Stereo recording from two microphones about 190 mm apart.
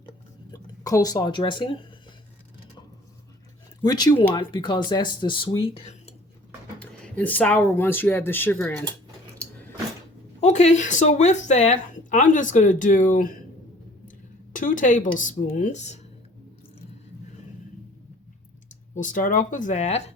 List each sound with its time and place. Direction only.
0.9 s speech: 20° left (ahead or behind)
3.8 s speech: 20° left (ahead or behind)
6.7 s speech: 10° left (ahead or behind)
10.4 s speech: 35° left (ahead or behind)
14.5 s speech: 45° left (ahead or behind)
18.9 s speech: 45° left (ahead or behind)